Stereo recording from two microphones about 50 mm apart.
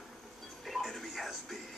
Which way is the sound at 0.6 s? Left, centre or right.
Centre.